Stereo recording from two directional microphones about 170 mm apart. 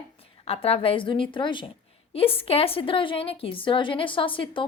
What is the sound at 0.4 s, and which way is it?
A woman's voice, 35° left (ahead or behind).